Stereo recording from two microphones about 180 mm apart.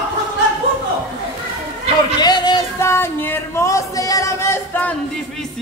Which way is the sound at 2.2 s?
25° left (ahead or behind).